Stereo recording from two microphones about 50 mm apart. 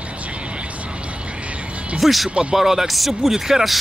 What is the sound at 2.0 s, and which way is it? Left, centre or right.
Speech, centre.